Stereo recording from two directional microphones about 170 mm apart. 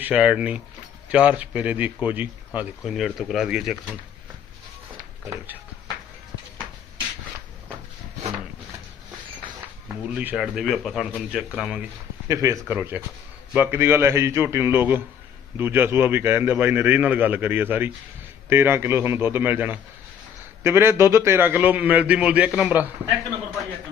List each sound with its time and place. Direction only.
0.0 s a man's voice: 5° right (ahead or behind)
10.1 s a man's voice: 10° right (ahead or behind)
12.3 s a man's voice: 20° right (ahead or behind)